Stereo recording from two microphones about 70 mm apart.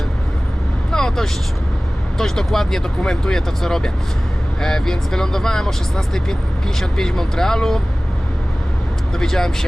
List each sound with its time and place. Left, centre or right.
0.9 s vehicle: centre
2.1 s speech: centre
6.7 s speech: centre
9.1 s speech: centre